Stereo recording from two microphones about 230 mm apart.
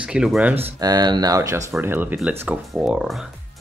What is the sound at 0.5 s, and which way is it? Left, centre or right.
Speech, centre.